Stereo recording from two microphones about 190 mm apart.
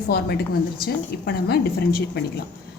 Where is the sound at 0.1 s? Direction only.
55° left (ahead or behind).